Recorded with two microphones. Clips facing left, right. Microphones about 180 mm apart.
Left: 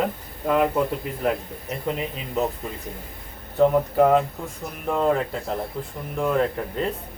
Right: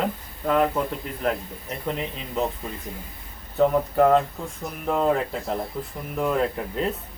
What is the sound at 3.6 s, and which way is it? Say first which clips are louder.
Speech: left 1 dB; 5° left (ahead or behind).